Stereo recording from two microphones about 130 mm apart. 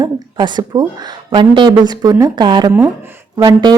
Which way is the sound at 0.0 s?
35° right (ahead or behind).